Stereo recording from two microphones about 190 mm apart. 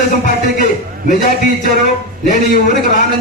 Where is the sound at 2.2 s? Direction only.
45° left (ahead or behind).